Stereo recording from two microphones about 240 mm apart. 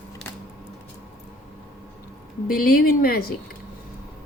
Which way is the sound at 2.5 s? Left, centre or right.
Left.